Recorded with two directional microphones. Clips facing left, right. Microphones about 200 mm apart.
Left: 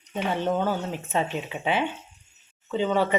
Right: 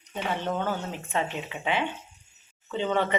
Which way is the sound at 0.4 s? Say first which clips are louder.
Left 4 dB; 10° left (ahead or behind).